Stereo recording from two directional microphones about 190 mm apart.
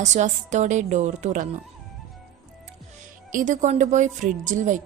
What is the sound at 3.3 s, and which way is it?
A woman's voice, 40° right (ahead or behind).